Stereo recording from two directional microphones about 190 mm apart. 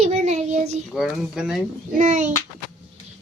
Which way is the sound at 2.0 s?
40° right (ahead or behind).